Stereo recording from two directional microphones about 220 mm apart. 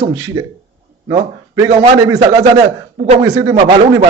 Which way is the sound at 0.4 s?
15° right (ahead or behind).